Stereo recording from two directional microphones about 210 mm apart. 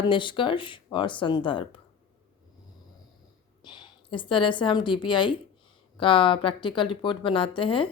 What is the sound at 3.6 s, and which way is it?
A woman's voice, 20° left (ahead or behind).